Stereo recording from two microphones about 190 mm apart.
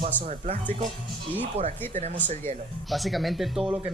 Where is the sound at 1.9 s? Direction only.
35° right (ahead or behind).